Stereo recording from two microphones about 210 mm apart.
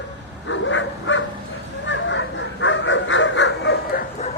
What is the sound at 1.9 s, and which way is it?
Fowl, 60° left (ahead or behind).